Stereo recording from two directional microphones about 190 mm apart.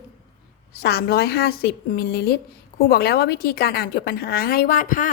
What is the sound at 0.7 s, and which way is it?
Speech, 55° left (ahead or behind).